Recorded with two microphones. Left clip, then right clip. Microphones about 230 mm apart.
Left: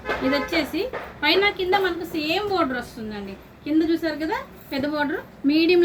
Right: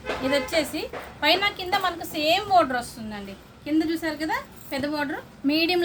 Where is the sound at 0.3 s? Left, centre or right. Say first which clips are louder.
Right 1 dB; right.